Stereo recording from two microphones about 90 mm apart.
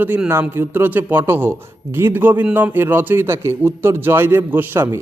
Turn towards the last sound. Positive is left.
turn(degrees=-30)  # may be behind; listen again after turning